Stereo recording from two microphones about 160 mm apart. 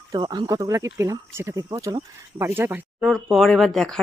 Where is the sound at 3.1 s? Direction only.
5° left (ahead or behind).